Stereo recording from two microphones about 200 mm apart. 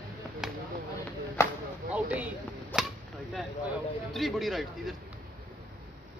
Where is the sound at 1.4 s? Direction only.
15° left (ahead or behind).